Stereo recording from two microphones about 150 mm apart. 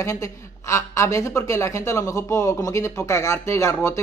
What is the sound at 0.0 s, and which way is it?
A man's voice, 20° left (ahead or behind).